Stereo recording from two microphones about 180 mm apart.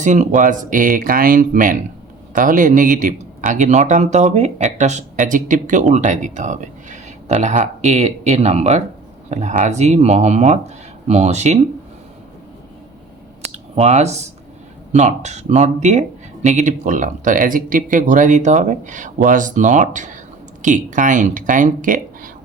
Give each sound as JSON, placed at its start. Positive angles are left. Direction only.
{"t": 0.0, "sound": "speech", "side_deg": -45}
{"t": 13.4, "sound": "a sound", "side_deg": -35}
{"t": 14.9, "sound": "speech", "side_deg": -40}